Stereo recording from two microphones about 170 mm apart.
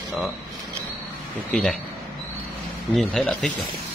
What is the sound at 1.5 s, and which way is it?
Speech, 5° left (ahead or behind).